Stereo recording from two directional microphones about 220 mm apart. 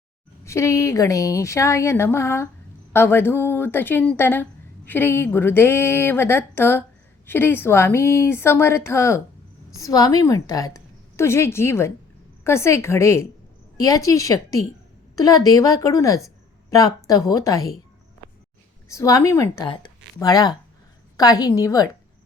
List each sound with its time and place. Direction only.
0.4 s a woman's voice: 15° left (ahead or behind)
18.9 s speech: 15° left (ahead or behind)